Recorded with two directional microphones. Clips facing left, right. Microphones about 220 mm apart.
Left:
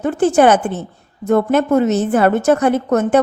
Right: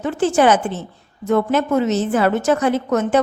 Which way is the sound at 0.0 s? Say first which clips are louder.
Left 3 dB; 55° left (ahead or behind).